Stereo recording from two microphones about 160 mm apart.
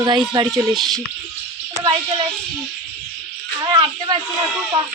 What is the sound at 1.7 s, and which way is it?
Speech, 25° right (ahead or behind).